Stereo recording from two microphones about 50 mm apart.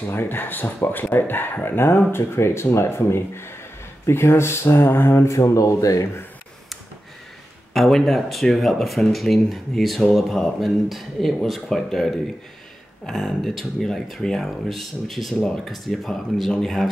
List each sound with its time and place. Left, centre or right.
0.1 s speech: left
2.1 s speech: left
7.7 s speech: centre